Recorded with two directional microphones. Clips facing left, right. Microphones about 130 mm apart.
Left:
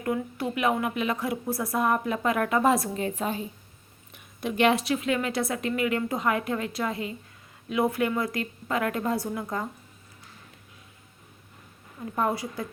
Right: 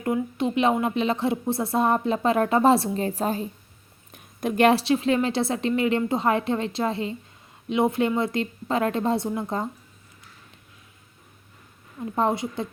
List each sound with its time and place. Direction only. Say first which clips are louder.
0.0 s a woman's voice: right 4 dB; 20° right (ahead or behind)
12.1 s a woman's voice: right 3 dB; 25° right (ahead or behind)